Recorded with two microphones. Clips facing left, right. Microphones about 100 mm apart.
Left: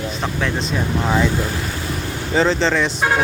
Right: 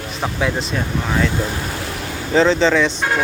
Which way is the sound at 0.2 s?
5° right (ahead or behind).